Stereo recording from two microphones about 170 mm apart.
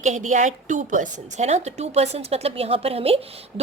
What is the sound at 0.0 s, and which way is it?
A woman's voice, 45° right (ahead or behind).